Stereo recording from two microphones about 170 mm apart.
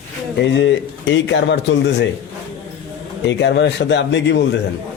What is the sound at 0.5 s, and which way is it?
Speech, 90° left.